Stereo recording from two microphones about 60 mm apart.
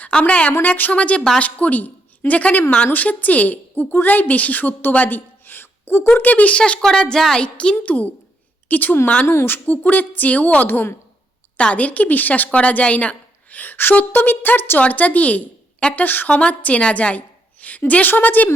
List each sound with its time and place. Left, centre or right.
0.0 s a woman's voice: left
6.8 s a woman's voice: centre
7.4 s a woman's voice: centre
9.2 s speech: left
9.5 s speech: left